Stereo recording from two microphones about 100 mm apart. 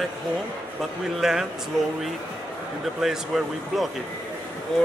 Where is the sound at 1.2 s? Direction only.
5° right (ahead or behind).